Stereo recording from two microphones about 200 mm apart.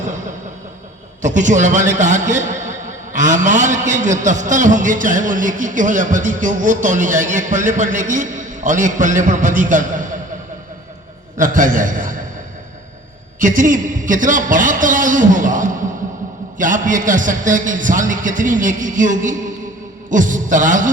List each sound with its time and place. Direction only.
1.2 s a man's voice: 40° right (ahead or behind)
11.3 s a man's voice: 40° right (ahead or behind)
13.4 s a man's voice: 40° right (ahead or behind)